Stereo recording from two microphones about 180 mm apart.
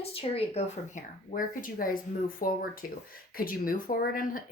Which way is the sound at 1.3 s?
50° left (ahead or behind).